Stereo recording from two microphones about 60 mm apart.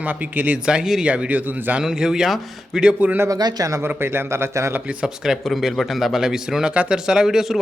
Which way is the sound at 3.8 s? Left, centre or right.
Right.